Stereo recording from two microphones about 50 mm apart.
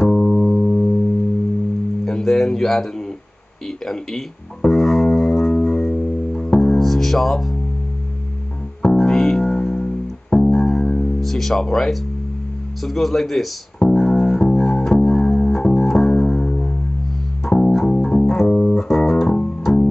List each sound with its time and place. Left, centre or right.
0.0 s music: centre
2.0 s speech: centre
4.6 s music: centre
8.8 s music: centre
11.1 s speech: centre
13.7 s music: centre
17.5 s bass guitar: centre
17.7 s music: centre